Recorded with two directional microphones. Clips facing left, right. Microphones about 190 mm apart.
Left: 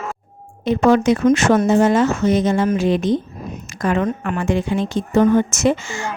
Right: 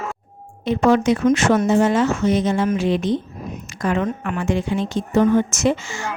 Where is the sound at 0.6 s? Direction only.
45° left (ahead or behind).